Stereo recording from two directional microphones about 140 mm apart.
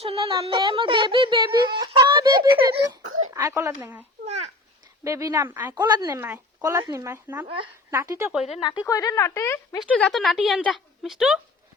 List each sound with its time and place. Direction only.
0.0 s a sound: 45° right (ahead or behind)
3.3 s speech: 20° right (ahead or behind)
5.0 s speech: 20° right (ahead or behind)
5.7 s speech: 30° right (ahead or behind)
6.1 s speech: 15° right (ahead or behind)
7.4 s speech: 40° right (ahead or behind)
7.9 s speech: 20° right (ahead or behind)
8.4 s a woman's voice: 45° left (ahead or behind)
8.8 s speech: 25° left (ahead or behind)
9.9 s speech: 5° left (ahead or behind)